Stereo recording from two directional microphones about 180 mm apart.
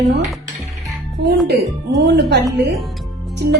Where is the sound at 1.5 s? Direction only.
65° right (ahead or behind).